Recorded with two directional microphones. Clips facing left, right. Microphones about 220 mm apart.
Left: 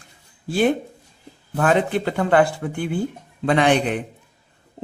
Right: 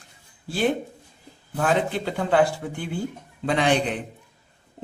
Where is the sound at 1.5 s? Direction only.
60° left (ahead or behind).